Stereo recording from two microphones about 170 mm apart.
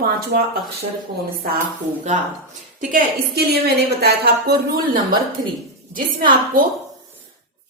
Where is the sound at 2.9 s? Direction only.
70° right (ahead or behind).